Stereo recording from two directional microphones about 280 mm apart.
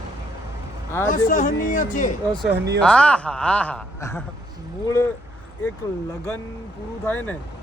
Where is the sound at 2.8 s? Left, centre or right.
Centre.